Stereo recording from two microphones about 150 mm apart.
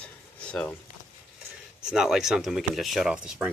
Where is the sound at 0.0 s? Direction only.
5° left (ahead or behind).